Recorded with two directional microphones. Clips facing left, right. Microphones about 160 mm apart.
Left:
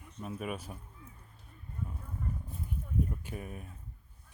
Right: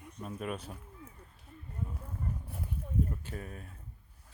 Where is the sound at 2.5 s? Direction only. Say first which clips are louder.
Right 1 dB; 70° right (ahead or behind).